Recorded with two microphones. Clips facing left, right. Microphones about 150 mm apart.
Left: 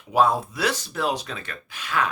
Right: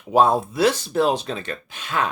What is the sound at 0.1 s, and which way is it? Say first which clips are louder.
Speech: right 3 dB; 30° right (ahead or behind).